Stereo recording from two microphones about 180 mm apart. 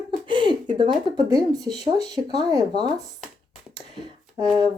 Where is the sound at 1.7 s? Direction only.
35° left (ahead or behind).